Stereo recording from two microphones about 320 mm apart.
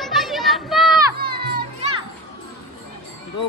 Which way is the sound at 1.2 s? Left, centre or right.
Right.